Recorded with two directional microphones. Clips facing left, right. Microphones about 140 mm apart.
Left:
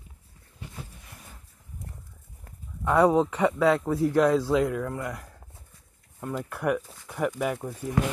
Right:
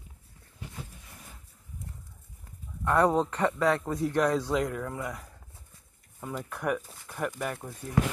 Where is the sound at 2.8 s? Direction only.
10° left (ahead or behind).